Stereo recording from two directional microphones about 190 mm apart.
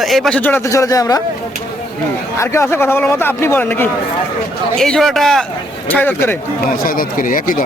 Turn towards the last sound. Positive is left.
turn(degrees=45)  # may be behind; listen again after turning